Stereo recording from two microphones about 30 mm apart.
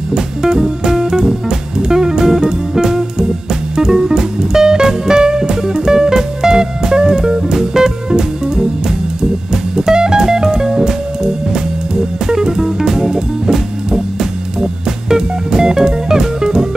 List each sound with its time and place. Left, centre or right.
0.1 s music: centre